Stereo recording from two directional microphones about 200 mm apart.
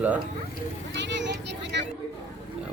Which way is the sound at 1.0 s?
60° right (ahead or behind).